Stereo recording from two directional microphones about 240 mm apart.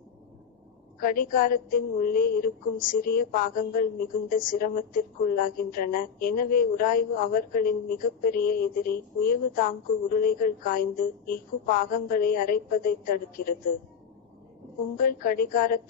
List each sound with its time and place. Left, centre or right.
0.9 s a woman's voice: left
15.0 s a woman's voice: left